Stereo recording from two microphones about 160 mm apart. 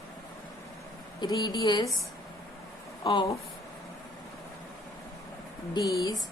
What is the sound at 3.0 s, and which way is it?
Speech, 30° left (ahead or behind).